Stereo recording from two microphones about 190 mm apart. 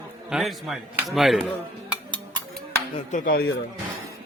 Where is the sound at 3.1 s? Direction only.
45° left (ahead or behind).